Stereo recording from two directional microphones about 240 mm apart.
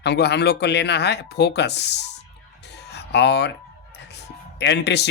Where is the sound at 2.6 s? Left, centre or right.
Left.